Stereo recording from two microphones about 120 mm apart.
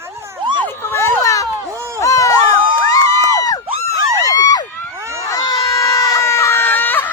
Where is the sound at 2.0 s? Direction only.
30° left (ahead or behind).